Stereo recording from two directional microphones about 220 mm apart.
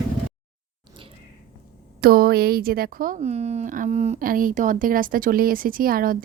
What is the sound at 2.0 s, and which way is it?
Speech, 45° right (ahead or behind).